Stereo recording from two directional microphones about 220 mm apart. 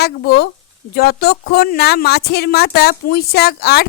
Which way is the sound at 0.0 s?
45° left (ahead or behind).